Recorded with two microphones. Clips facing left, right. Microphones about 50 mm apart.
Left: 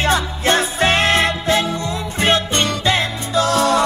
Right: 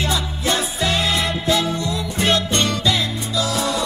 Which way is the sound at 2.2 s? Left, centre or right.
Left.